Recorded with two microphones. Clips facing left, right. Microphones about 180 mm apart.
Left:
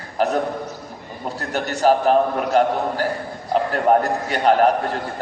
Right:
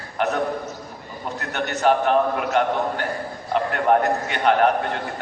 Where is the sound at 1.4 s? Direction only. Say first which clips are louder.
Left 2 dB; 35° left (ahead or behind).